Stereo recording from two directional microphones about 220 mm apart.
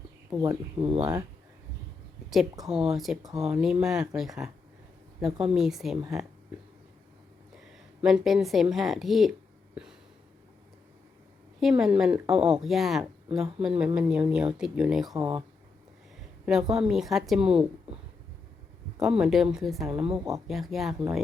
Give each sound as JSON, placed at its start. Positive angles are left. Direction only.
{"t": 0.3, "sound": "speech", "side_deg": -5}
{"t": 0.8, "sound": "speech", "side_deg": -25}
{"t": 2.3, "sound": "speech", "side_deg": 0}
{"t": 8.0, "sound": "speech", "side_deg": 0}
{"t": 11.6, "sound": "speech", "side_deg": -5}
{"t": 16.5, "sound": "speech", "side_deg": 0}
{"t": 18.9, "sound": "speech", "side_deg": -5}